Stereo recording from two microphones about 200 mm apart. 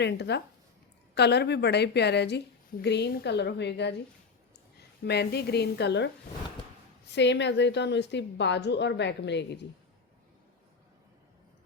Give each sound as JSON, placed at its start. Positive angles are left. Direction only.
{"t": 0.0, "sound": "a woman's voice", "side_deg": 60}
{"t": 5.0, "sound": "a woman's voice", "side_deg": 55}
{"t": 7.1, "sound": "a woman's voice", "side_deg": 60}